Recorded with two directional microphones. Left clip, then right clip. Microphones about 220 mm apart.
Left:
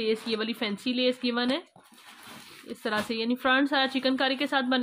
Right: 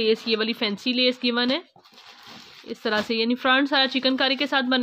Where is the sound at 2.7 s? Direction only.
20° right (ahead or behind).